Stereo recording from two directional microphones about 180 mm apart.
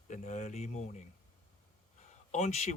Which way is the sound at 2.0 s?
40° left (ahead or behind).